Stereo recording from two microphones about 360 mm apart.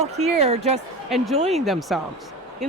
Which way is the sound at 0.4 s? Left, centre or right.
Centre.